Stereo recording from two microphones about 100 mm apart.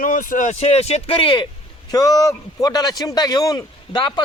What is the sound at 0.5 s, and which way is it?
Speech, 90° left.